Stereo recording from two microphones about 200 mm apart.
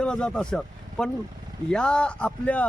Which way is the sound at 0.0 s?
5° left (ahead or behind).